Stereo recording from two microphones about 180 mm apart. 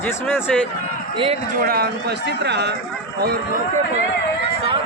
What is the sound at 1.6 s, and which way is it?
A man's voice, 60° right (ahead or behind).